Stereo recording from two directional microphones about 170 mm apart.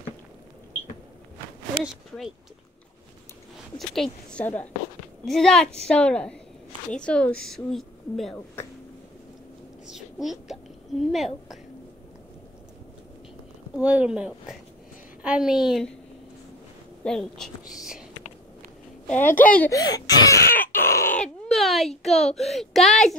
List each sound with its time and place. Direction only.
3.7 s a woman's voice: centre (ahead or behind)
9.8 s a woman's voice: centre (ahead or behind)
13.7 s a woman's voice: 5° right (ahead or behind)
17.0 s a woman's voice: 5° left (ahead or behind)
19.0 s a woman's voice: 10° left (ahead or behind)
19.7 s speech: 25° left (ahead or behind)
20.5 s a sound: 10° left (ahead or behind)